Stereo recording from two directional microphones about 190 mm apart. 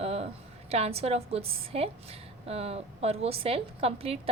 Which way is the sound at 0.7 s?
35° right (ahead or behind).